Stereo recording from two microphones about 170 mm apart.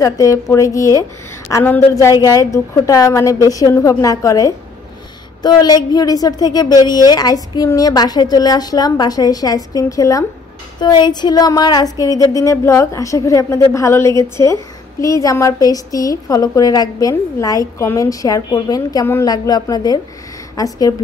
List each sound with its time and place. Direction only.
0.0 s a woman's voice: 20° left (ahead or behind)